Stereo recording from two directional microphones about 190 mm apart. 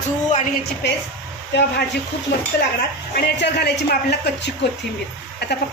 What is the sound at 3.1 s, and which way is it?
Speech, 60° left (ahead or behind).